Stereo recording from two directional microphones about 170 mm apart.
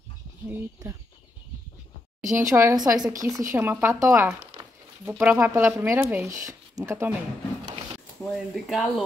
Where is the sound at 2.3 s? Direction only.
15° right (ahead or behind).